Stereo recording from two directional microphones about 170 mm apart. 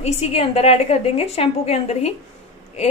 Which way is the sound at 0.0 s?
35° left (ahead or behind).